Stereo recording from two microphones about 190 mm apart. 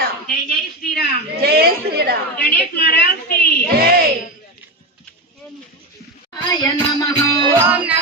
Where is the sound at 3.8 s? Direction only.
55° right (ahead or behind).